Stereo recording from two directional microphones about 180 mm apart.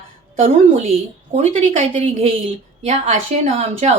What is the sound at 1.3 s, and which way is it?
Speech, 50° right (ahead or behind).